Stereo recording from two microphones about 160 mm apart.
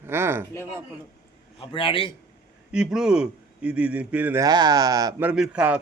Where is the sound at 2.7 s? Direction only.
5° right (ahead or behind).